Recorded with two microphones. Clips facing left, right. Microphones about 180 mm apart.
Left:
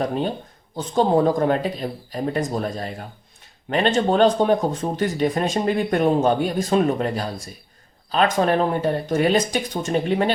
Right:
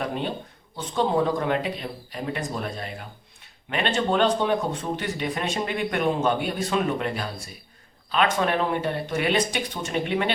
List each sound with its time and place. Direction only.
0.0 s speech: 40° left (ahead or behind)